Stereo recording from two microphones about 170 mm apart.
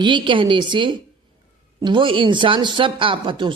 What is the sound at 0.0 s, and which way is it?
Speech, 30° right (ahead or behind).